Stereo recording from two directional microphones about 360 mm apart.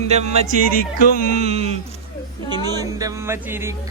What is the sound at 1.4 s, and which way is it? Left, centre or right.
Speech, centre.